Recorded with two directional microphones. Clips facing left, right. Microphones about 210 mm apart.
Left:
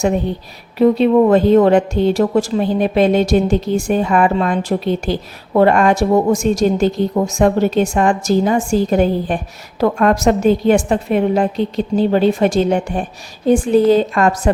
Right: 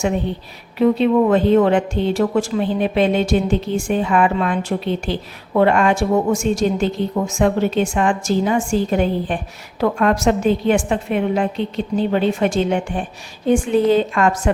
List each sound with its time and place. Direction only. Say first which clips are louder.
0.8 s a woman's voice: left 3 dB; 40° left (ahead or behind)